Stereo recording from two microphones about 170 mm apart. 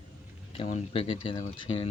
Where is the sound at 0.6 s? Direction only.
40° left (ahead or behind).